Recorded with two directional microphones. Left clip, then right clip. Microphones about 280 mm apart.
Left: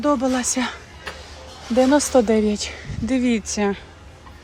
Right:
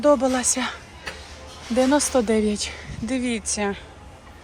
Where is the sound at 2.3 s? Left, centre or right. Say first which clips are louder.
Left 2 dB; centre.